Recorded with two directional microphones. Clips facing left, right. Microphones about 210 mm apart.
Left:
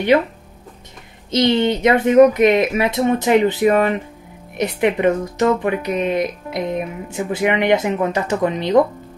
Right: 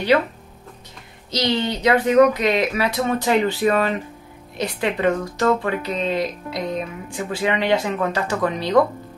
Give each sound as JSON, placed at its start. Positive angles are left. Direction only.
{"t": 1.3, "sound": "speech", "side_deg": 25}